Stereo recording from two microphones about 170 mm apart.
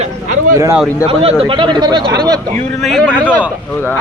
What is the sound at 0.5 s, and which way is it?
Speech, 20° right (ahead or behind).